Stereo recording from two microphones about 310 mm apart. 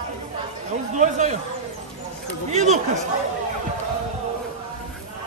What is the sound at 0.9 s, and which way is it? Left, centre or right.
Speech, right.